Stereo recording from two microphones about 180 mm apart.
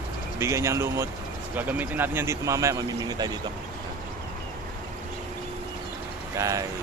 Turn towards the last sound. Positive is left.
turn(degrees=-15)  # may be behind; listen again after turning